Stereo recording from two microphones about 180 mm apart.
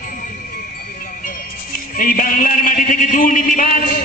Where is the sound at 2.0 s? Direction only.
50° left (ahead or behind).